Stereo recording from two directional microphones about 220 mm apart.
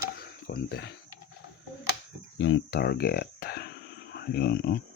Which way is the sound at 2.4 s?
60° left (ahead or behind).